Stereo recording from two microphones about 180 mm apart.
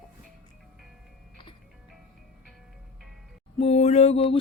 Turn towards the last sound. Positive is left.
turn(degrees=35)  # may be behind; listen again after turning